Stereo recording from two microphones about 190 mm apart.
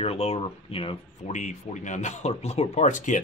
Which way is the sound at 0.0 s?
30° left (ahead or behind).